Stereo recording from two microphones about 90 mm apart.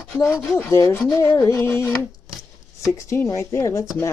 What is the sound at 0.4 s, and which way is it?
Speech, 25° left (ahead or behind).